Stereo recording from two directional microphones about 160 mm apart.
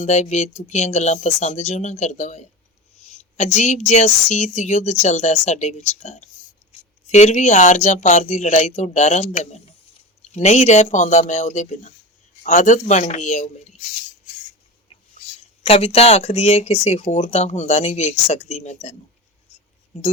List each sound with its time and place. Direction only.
0.0 s speech: 45° left (ahead or behind)
15.6 s speech: 40° left (ahead or behind)